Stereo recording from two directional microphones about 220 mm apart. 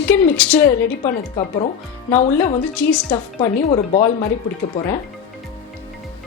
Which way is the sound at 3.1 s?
20° left (ahead or behind).